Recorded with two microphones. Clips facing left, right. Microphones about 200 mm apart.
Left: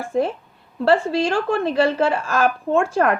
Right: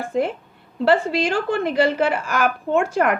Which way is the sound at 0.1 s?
20° right (ahead or behind).